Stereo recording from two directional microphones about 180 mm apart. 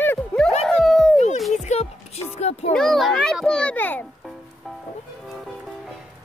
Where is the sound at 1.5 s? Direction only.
40° left (ahead or behind).